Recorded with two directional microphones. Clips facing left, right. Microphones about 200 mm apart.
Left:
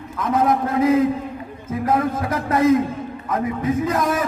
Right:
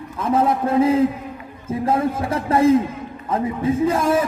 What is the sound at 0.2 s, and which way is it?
A man's voice, 30° right (ahead or behind).